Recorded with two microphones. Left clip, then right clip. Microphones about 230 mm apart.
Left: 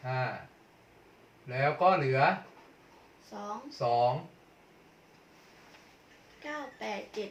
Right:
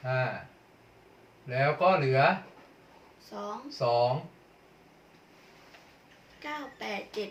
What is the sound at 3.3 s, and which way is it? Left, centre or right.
Speech, right.